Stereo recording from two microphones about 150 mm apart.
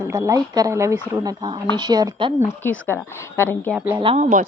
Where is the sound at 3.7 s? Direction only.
10° right (ahead or behind).